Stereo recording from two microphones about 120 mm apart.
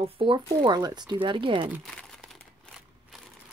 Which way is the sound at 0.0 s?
50° right (ahead or behind).